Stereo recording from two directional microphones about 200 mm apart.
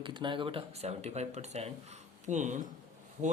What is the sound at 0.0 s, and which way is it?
Speech, 25° right (ahead or behind).